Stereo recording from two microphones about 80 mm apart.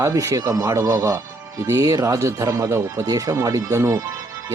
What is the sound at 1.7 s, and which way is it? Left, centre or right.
A man's voice, right.